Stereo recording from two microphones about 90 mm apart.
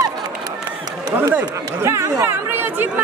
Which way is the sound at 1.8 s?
30° right (ahead or behind).